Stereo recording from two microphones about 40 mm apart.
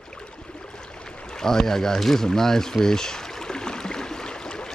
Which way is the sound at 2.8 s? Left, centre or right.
Centre.